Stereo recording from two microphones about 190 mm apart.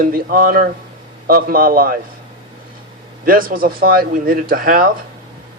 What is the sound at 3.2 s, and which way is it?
A man's voice, 50° right (ahead or behind).